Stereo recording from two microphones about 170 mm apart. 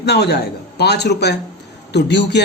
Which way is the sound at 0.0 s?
75° left (ahead or behind).